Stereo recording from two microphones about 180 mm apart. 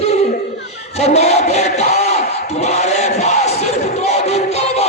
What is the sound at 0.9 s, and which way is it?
Crowd, 40° left (ahead or behind).